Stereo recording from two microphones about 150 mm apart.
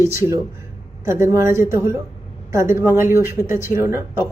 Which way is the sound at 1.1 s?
20° right (ahead or behind).